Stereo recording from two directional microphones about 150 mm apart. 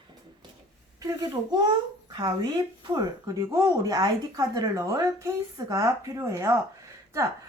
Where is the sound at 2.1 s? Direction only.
25° right (ahead or behind).